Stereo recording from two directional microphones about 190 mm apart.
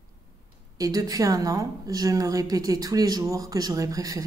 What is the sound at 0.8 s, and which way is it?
A woman's voice, 20° right (ahead or behind).